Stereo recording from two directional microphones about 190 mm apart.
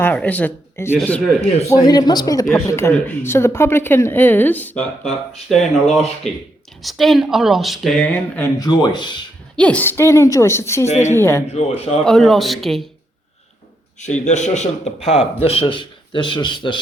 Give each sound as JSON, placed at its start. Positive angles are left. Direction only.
{"t": 0.0, "sound": "speech", "side_deg": 10}
{"t": 1.8, "sound": "speech", "side_deg": 20}
{"t": 8.4, "sound": "speech", "side_deg": 20}
{"t": 9.6, "sound": "speech", "side_deg": 5}
{"t": 10.8, "sound": "a man's voice", "side_deg": 35}
{"t": 11.1, "sound": "speech", "side_deg": 15}
{"t": 11.4, "sound": "a man's voice", "side_deg": 35}
{"t": 12.0, "sound": "speech", "side_deg": 0}
{"t": 14.0, "sound": "a man's voice", "side_deg": 40}